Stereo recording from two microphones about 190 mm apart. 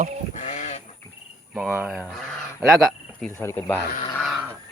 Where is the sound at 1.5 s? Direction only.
10° right (ahead or behind); by 3.8 s 10° left (ahead or behind).